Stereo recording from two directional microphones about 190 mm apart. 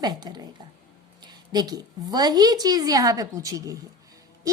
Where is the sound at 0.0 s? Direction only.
20° right (ahead or behind).